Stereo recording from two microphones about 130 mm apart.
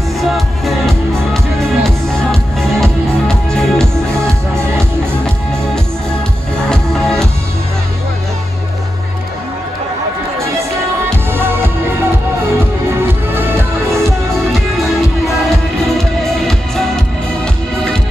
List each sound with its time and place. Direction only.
0.2 s music: centre (ahead or behind)
4.2 s music: 20° right (ahead or behind)
6.7 s music: 5° left (ahead or behind)
11.3 s music: 15° right (ahead or behind)
13.3 s music: 15° right (ahead or behind)
15.2 s music: centre (ahead or behind)